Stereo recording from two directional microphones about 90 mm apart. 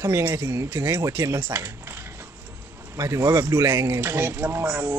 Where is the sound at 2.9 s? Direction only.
35° right (ahead or behind).